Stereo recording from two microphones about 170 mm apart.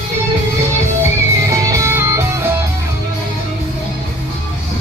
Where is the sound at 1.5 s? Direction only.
20° right (ahead or behind).